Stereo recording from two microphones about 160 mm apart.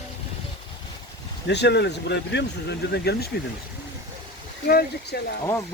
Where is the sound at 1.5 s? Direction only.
90° left.